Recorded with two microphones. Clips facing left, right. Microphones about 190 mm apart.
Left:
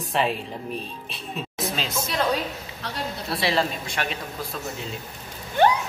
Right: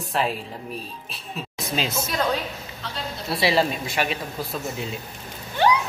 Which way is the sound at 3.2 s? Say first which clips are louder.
Right 4 dB; 5° right (ahead or behind).